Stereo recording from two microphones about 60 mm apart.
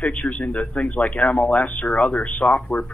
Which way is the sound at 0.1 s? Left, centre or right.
Centre.